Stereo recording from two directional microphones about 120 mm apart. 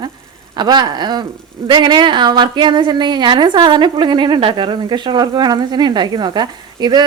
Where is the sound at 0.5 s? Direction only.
35° right (ahead or behind).